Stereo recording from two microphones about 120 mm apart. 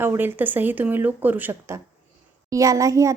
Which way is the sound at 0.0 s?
20° right (ahead or behind).